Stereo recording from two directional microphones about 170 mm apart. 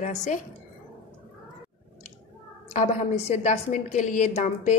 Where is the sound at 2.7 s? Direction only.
45° left (ahead or behind).